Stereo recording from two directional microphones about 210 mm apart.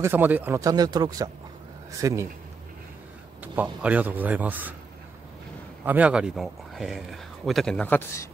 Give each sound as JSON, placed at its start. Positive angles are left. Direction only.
{"t": 0.0, "sound": "speech", "side_deg": -10}
{"t": 3.5, "sound": "speech", "side_deg": -5}
{"t": 5.9, "sound": "speech", "side_deg": -5}